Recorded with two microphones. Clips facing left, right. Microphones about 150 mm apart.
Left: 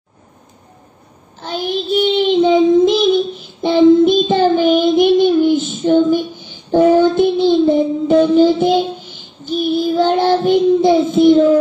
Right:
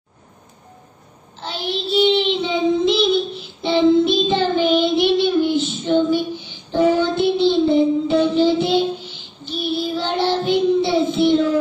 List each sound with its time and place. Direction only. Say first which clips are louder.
1.5 s child singing: left 4 dB; 50° left (ahead or behind)